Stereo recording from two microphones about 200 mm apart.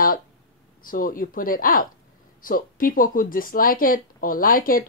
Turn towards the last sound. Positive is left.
turn(degrees=45)  # may be behind; listen again after turning